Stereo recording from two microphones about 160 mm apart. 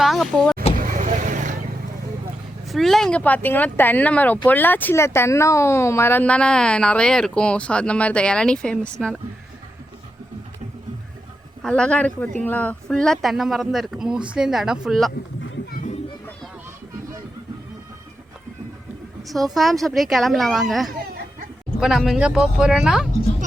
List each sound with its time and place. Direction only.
0.0 s speech: centre (ahead or behind)
0.8 s vehicle: 55° right (ahead or behind)
2.6 s speech: centre (ahead or behind)
11.6 s speech: 5° left (ahead or behind)
19.3 s speech: centre (ahead or behind)